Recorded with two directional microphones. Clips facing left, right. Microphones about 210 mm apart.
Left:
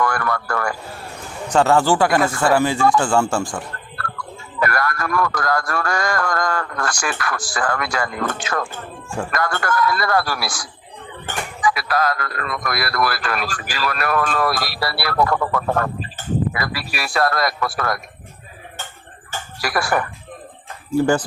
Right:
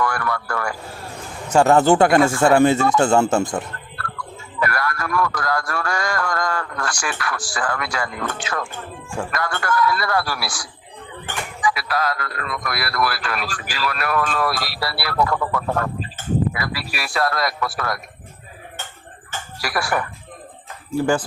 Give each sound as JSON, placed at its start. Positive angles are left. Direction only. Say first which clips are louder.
{"t": 0.0, "sound": "speech", "louder": "left 2 dB", "side_deg": 45}
{"t": 1.5, "sound": "speech", "louder": "right 2 dB", "side_deg": -15}
{"t": 4.6, "sound": "a man's voice", "louder": "left 2 dB", "side_deg": 45}
{"t": 19.6, "sound": "a man's voice", "louder": "left 2 dB", "side_deg": 50}